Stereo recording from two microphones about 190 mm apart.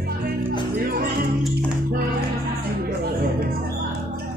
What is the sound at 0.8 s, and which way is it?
Music, 50° right (ahead or behind).